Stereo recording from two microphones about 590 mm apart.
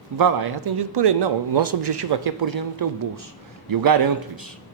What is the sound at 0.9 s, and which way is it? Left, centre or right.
Speech, right.